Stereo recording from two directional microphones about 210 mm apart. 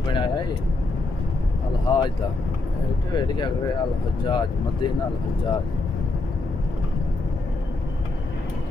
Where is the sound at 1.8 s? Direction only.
20° left (ahead or behind).